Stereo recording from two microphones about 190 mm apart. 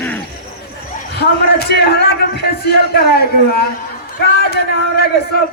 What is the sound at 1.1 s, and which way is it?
A man's voice, 60° left (ahead or behind).